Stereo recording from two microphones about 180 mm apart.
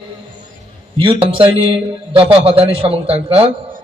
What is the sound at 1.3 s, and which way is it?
A man's voice, 30° right (ahead or behind).